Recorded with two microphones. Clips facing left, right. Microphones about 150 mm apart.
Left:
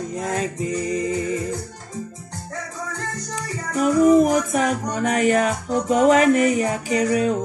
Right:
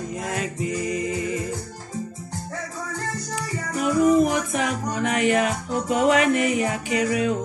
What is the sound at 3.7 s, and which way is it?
Music, 40° left (ahead or behind).